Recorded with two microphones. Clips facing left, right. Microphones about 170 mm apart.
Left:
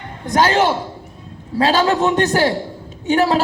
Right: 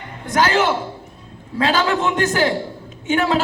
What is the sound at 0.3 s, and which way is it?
A man's voice, 35° left (ahead or behind).